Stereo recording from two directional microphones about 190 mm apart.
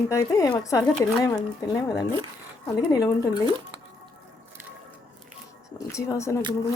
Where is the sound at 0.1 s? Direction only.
15° left (ahead or behind).